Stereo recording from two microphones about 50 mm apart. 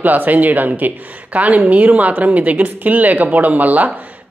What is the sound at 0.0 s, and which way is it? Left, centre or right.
A woman's voice, right.